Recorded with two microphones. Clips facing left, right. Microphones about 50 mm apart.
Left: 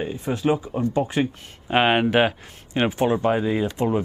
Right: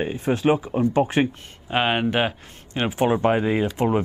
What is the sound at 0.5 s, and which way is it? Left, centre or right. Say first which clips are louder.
Speech: right 1 dB; right.